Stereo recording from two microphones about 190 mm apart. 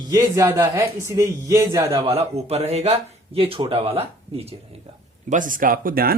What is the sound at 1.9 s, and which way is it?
Speech, 30° right (ahead or behind).